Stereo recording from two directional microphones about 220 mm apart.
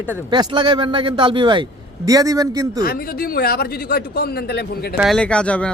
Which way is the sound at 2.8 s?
40° left (ahead or behind).